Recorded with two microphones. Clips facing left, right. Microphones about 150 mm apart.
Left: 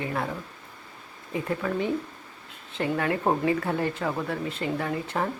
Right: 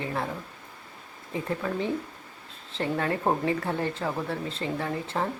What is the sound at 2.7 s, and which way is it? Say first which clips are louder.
Speech: left 1 dB; 30° right (ahead or behind).